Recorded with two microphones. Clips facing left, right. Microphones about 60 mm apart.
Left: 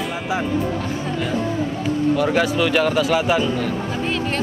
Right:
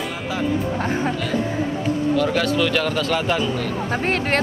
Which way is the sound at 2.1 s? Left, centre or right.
Centre.